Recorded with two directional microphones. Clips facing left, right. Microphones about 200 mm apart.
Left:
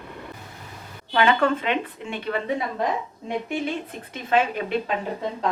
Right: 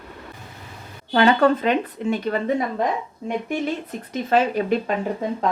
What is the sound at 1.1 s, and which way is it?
A woman's voice, 35° right (ahead or behind).